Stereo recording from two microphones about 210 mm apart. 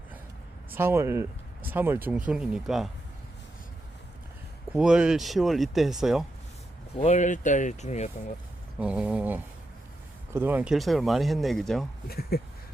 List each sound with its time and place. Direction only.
0.7 s speech: 10° right (ahead or behind)
4.7 s speech: 5° right (ahead or behind)
6.9 s speech: 30° left (ahead or behind)
8.8 s speech: 5° right (ahead or behind)
12.0 s speech: 45° left (ahead or behind)